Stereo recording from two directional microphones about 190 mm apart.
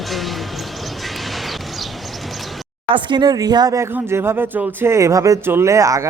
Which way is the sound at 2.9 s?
25° right (ahead or behind).